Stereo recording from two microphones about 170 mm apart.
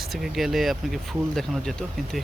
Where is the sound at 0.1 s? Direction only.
Centre (ahead or behind).